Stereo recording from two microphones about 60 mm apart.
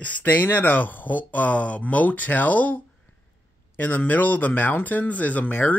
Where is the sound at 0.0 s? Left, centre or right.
Left.